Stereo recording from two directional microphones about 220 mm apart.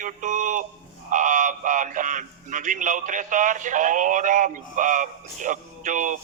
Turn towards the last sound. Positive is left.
turn(degrees=-35)  # may be behind; listen again after turning